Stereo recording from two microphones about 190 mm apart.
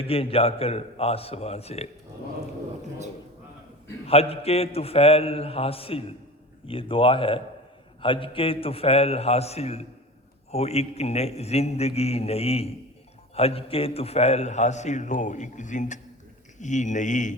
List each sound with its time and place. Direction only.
0.0 s a man's voice: 30° left (ahead or behind)
4.0 s a man's voice: 30° left (ahead or behind)